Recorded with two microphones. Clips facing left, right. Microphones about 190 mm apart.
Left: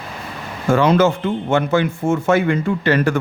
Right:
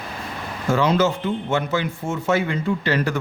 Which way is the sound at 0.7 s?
55° left (ahead or behind).